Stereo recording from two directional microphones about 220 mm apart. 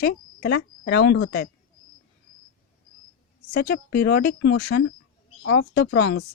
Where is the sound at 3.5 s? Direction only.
45° left (ahead or behind).